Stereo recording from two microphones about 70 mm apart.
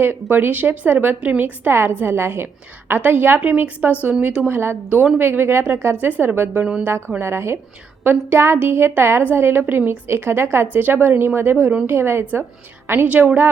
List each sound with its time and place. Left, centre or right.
0.0 s a woman's voice: right
4.4 s a woman's voice: right